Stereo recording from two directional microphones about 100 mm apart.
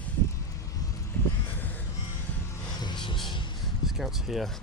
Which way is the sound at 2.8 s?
55° left (ahead or behind).